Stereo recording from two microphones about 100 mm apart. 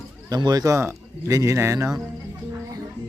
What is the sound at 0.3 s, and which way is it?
Speech, 40° right (ahead or behind).